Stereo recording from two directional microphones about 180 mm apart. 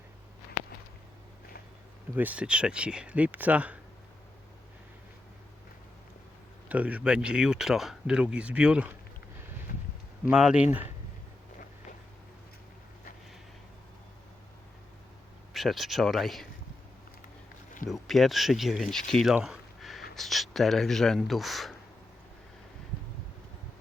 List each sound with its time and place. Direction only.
2.1 s speech: 10° right (ahead or behind)
6.7 s speech: 10° right (ahead or behind)
10.2 s speech: 5° right (ahead or behind)
15.5 s speech: centre (ahead or behind)
17.8 s speech: centre (ahead or behind)